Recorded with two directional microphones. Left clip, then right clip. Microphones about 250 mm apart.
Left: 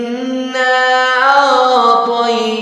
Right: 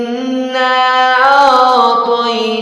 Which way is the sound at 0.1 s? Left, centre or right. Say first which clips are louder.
Right 2 dB; centre.